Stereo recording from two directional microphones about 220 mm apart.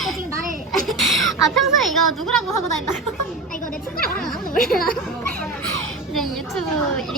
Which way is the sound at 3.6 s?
40° left (ahead or behind).